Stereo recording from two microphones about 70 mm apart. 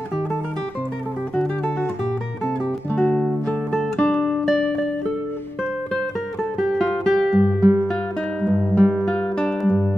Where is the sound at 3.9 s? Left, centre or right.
Centre.